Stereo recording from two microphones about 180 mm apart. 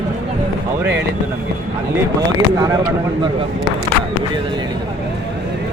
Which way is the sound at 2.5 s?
20° right (ahead or behind).